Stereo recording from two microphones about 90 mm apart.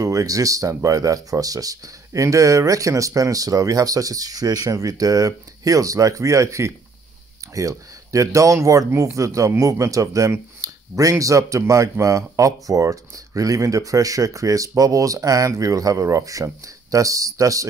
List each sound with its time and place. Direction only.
0.0 s speech: 40° right (ahead or behind)